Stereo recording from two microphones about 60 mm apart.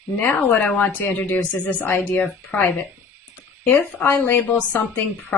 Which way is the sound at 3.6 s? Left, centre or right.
Left.